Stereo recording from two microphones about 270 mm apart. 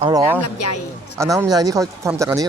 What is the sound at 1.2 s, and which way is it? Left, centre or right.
Speech, centre.